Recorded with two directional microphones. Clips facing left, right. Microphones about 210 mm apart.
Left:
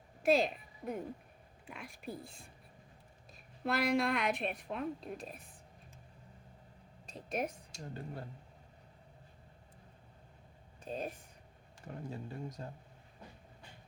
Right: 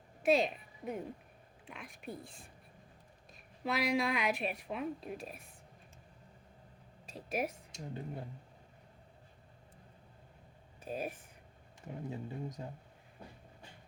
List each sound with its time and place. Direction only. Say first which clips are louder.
0.2 s a woman's voice: even; centre (ahead or behind)
3.6 s a woman's voice: left 1 dB; centre (ahead or behind)
7.1 s a woman's voice: right 1 dB; centre (ahead or behind)
7.7 s speech: right 2 dB; 15° right (ahead or behind)
10.8 s speech: right 1 dB; 10° right (ahead or behind)